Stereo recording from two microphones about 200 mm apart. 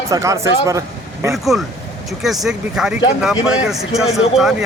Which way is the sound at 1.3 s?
Centre (ahead or behind).